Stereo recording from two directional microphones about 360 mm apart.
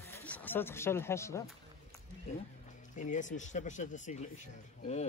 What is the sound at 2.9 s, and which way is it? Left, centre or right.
Speech, left.